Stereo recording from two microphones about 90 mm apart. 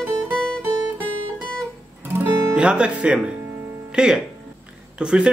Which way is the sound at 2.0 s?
25° right (ahead or behind).